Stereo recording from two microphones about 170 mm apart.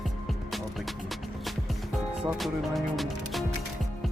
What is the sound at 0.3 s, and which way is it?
Music, centre (ahead or behind).